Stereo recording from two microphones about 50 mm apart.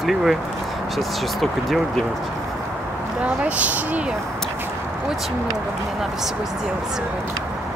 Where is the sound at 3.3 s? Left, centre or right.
Right.